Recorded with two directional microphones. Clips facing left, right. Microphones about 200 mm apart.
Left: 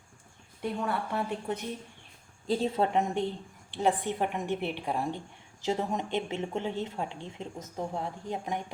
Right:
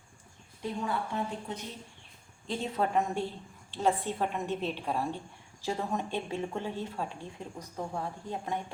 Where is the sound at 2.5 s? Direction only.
30° left (ahead or behind).